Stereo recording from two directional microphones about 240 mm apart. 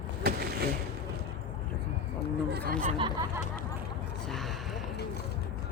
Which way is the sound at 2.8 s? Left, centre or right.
Right.